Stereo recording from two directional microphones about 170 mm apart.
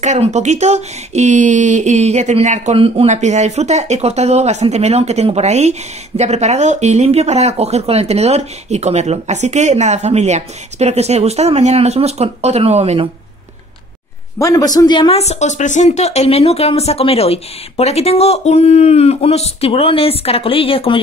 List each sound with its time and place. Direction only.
0.0 s speech: 45° right (ahead or behind)
14.4 s speech: 20° left (ahead or behind)